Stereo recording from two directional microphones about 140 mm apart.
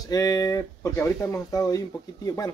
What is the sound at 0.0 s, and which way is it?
Speech, 25° left (ahead or behind).